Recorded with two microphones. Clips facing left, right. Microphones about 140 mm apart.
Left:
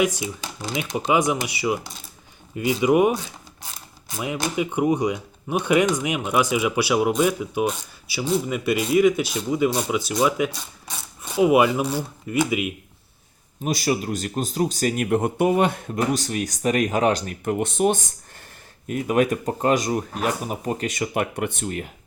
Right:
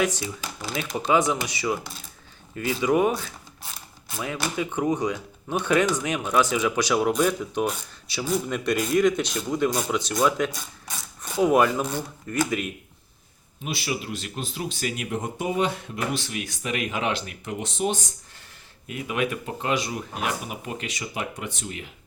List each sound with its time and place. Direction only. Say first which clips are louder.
0.0 s speech: left 3 dB; 10° left (ahead or behind)
4.5 s speech: left 4 dB; 15° left (ahead or behind)
13.7 s speech: left 7 dB; 40° left (ahead or behind)
15.1 s speech: left 8 dB; 60° left (ahead or behind)
16.0 s speech: left 8 dB; 40° left (ahead or behind)
18.9 s speech: left 7 dB; 45° left (ahead or behind)